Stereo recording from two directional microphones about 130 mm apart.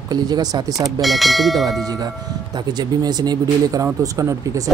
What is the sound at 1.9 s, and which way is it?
Speech, 30° right (ahead or behind).